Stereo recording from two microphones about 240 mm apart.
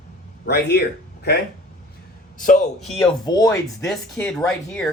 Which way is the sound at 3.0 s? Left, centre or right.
Centre.